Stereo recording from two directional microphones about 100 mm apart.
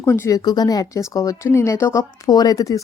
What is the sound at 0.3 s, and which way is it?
Speech, 40° left (ahead or behind).